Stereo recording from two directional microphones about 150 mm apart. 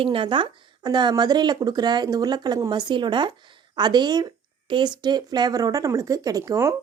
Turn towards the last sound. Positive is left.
turn(degrees=-20)  # may be behind; listen again after turning